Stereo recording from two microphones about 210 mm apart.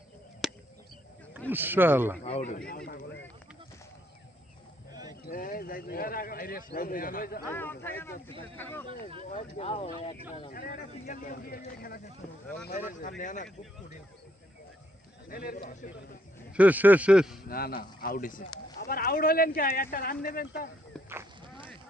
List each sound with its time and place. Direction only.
0.4 s a sound: centre (ahead or behind)
1.5 s a man's voice: 10° right (ahead or behind)
2.2 s speech: 30° left (ahead or behind); by 3.0 s 45° left (ahead or behind)
5.2 s speech: 40° left (ahead or behind)
7.4 s speech: 10° left (ahead or behind)
9.3 s speech: 30° left (ahead or behind)
10.5 s speech: 45° left (ahead or behind)
15.3 s speech: 45° left (ahead or behind)
16.5 s a man's voice: 5° right (ahead or behind)
17.5 s speech: 45° left (ahead or behind)
20.9 s livestock: 5° left (ahead or behind)